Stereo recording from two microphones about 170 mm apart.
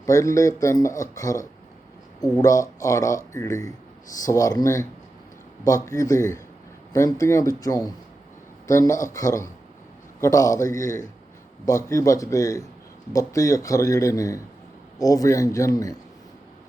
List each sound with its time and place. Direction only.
0.0 s speech: 20° left (ahead or behind)